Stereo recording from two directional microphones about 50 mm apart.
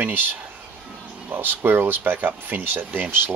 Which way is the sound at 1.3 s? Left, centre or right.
Right.